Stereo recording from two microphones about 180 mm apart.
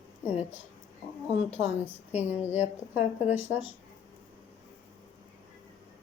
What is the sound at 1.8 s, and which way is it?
A woman's voice, 10° right (ahead or behind).